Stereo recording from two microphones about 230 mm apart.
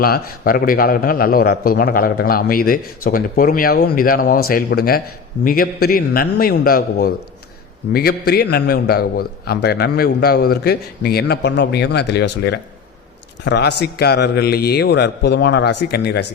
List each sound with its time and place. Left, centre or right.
0.0 s a man's voice: left
8.3 s a man's voice: left